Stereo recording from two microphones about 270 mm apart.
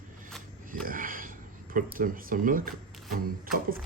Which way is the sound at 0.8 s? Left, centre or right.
Right.